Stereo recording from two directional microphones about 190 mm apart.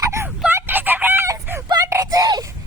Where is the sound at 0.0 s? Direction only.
15° right (ahead or behind).